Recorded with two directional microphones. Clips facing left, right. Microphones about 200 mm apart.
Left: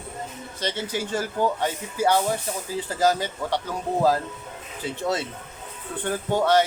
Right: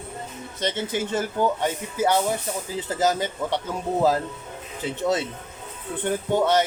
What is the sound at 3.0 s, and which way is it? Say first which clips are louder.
Speech: left 1 dB; 20° right (ahead or behind).